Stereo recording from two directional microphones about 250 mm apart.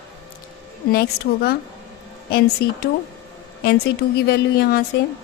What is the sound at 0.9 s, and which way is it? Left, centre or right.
Speech, left.